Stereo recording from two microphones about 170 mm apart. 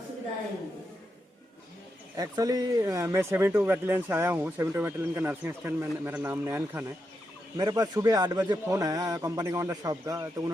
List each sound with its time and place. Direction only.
2.1 s speech: 20° right (ahead or behind)